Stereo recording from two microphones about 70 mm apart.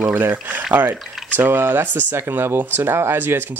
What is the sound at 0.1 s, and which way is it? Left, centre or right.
Speech, right.